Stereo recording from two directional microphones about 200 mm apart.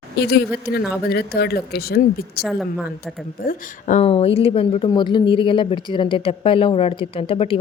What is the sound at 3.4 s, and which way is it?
A woman's voice, 40° left (ahead or behind).